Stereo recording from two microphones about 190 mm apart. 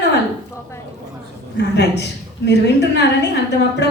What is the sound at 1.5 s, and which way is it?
Speech, 65° left (ahead or behind).